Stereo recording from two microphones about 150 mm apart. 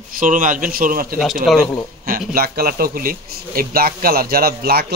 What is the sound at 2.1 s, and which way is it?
Speech, 80° right.